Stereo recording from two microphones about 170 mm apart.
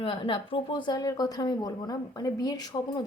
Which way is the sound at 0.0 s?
30° left (ahead or behind).